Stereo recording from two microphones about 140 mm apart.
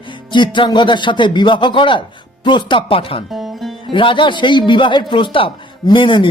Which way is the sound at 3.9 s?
35° left (ahead or behind).